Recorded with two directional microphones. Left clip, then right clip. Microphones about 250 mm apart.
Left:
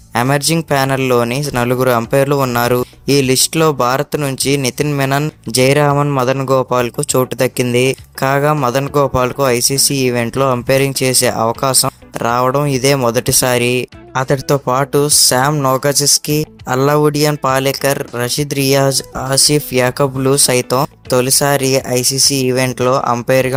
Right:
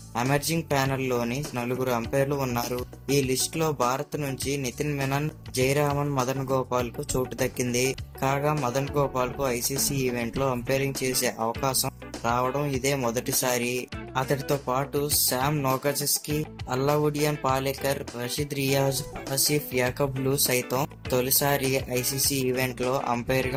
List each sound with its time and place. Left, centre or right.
0.1 s speech: left